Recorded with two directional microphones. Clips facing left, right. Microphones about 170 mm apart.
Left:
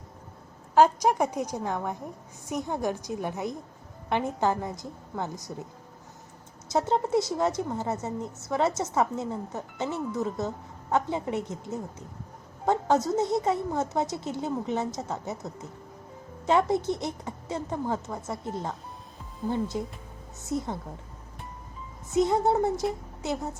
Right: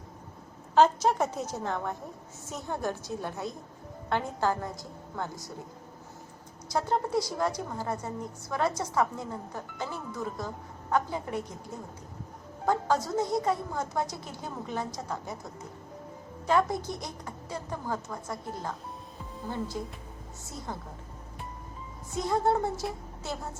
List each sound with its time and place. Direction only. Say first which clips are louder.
0.8 s a woman's voice: left 2 dB; 15° left (ahead or behind)
6.7 s a woman's voice: left 3 dB; 20° left (ahead or behind)
16.5 s a woman's voice: left 3 dB; 25° left (ahead or behind)
22.1 s a woman's voice: left 4 dB; 20° left (ahead or behind)